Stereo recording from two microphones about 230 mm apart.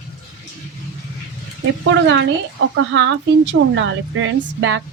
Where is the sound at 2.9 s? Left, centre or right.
Right.